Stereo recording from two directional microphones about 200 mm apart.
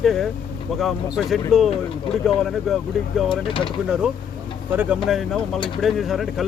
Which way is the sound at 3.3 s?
25° left (ahead or behind).